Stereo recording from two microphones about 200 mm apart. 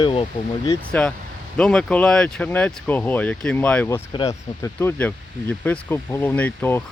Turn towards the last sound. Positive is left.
turn(degrees=10)  # may be behind; listen again after turning